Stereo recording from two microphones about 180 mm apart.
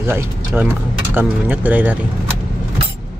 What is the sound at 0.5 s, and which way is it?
Speech, 5° right (ahead or behind).